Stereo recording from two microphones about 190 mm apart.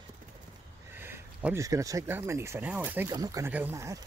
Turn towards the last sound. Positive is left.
turn(degrees=-15)  # may be behind; listen again after turning